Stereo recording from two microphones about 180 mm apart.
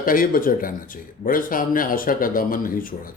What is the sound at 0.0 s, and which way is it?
Speech, 50° left (ahead or behind).